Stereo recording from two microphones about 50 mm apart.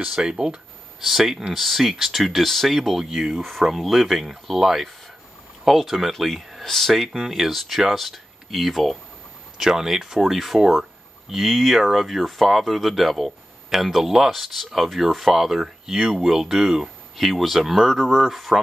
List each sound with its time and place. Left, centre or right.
0.0 s speech: centre
1.0 s speech: centre